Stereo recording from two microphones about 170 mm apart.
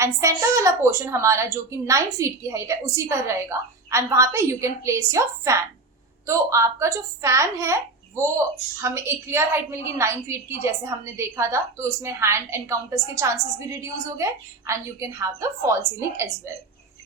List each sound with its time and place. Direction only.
0.0 s a woman's voice: 15° right (ahead or behind)